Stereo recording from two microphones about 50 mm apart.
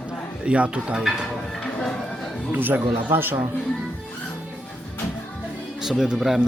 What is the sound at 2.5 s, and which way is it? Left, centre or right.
Speech, right.